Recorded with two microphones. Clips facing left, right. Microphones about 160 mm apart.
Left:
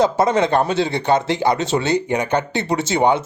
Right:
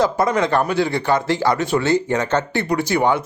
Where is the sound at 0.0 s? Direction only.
25° left (ahead or behind).